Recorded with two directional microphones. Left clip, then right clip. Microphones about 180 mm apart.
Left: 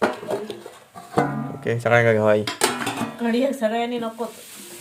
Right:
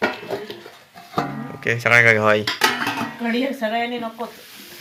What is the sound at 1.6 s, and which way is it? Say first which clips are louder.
Speech: right 4 dB; 20° left (ahead or behind).